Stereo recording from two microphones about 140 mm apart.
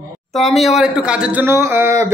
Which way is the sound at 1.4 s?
15° right (ahead or behind).